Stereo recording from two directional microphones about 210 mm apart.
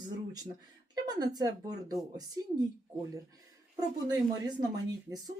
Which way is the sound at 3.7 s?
20° right (ahead or behind).